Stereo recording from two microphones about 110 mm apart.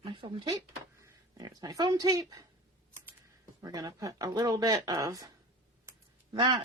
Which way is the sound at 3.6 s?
35° right (ahead or behind).